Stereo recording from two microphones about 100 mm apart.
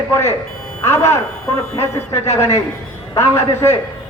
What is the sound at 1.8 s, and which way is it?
Speech, 25° left (ahead or behind).